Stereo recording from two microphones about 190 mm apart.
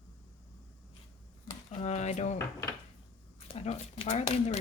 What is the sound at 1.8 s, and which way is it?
Speech, 35° left (ahead or behind).